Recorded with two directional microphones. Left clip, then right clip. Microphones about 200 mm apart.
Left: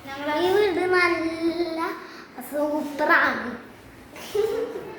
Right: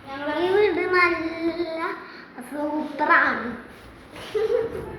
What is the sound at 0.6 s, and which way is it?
Child singing, 10° left (ahead or behind).